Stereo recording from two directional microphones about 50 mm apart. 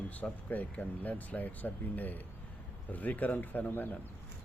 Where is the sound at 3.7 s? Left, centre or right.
Left.